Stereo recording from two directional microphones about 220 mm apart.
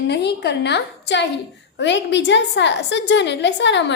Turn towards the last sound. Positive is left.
turn(degrees=55)  # may be behind; listen again after turning